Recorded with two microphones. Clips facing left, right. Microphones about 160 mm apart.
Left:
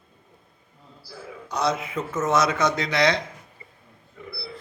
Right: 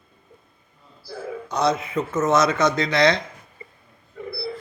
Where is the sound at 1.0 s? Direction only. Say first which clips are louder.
Right 8 dB; 50° right (ahead or behind).